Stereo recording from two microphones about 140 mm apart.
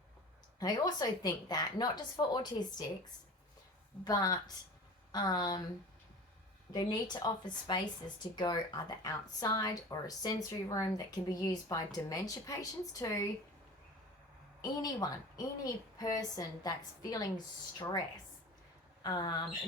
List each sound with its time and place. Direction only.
0.6 s speech: 25° left (ahead or behind)
6.7 s speech: 30° left (ahead or behind)
14.6 s speech: 25° left (ahead or behind)
19.0 s speech: 30° left (ahead or behind)